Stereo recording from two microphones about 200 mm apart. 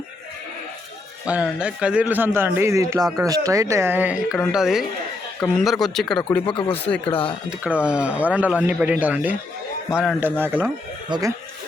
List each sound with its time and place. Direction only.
1.3 s a man's voice: 5° right (ahead or behind)
6.4 s speech: 25° left (ahead or behind)
7.6 s a man's voice: 5° right (ahead or behind)